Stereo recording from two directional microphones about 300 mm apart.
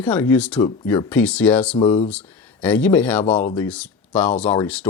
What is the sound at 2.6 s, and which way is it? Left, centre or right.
Speech, centre.